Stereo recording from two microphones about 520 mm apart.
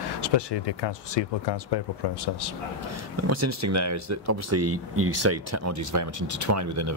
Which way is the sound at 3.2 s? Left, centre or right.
Right.